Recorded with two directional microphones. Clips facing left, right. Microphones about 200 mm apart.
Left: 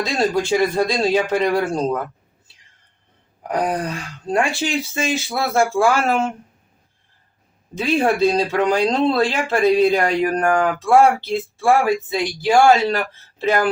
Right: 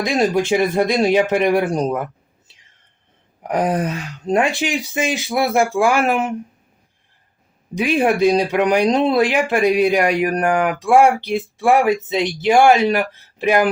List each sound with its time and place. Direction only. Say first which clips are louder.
0.0 s speech: right 2 dB; 15° right (ahead or behind)
3.4 s speech: right 3 dB; 20° right (ahead or behind)
7.8 s speech: right 1 dB; 15° right (ahead or behind)